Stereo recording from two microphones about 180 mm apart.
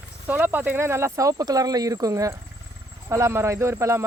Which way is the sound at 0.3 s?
10° right (ahead or behind).